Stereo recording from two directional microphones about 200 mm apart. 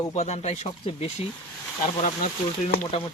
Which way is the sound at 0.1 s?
35° left (ahead or behind).